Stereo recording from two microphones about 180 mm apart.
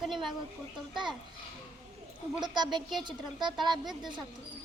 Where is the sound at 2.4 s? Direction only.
25° right (ahead or behind).